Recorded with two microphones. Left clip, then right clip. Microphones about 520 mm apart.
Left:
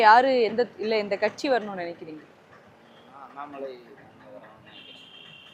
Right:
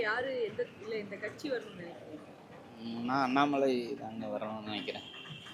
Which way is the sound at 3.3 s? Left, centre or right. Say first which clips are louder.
Right 5 dB; right.